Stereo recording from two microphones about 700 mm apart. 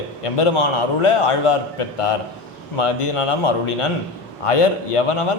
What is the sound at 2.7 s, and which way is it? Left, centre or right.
A man's voice, left.